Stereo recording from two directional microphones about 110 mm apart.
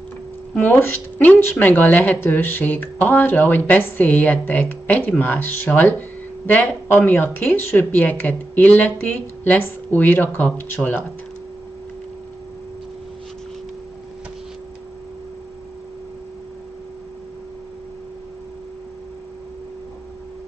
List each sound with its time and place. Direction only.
0.6 s speech: 15° left (ahead or behind)
5.9 s a sound: 15° left (ahead or behind)
7.1 s speech: 20° left (ahead or behind)